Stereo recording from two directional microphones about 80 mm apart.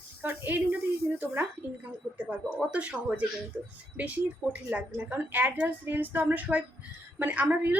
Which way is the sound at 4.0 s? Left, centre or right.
Centre.